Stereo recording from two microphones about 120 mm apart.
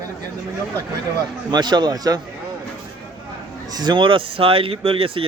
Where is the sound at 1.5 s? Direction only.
35° right (ahead or behind).